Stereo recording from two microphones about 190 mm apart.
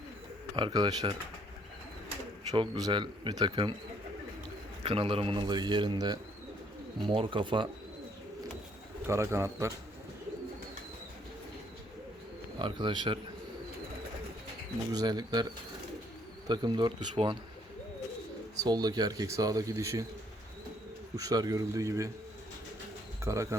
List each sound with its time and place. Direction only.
0.5 s speech: 25° right (ahead or behind)
2.5 s speech: 20° right (ahead or behind)
4.8 s speech: 30° right (ahead or behind)
9.0 s a man's voice: 15° right (ahead or behind)
12.5 s speech: 25° right (ahead or behind)
14.9 s speech: 20° right (ahead or behind)
16.5 s speech: 25° right (ahead or behind)
18.6 s speech: 20° right (ahead or behind)
21.2 s a man's voice: 20° right (ahead or behind)
23.2 s a man's voice: 15° right (ahead or behind)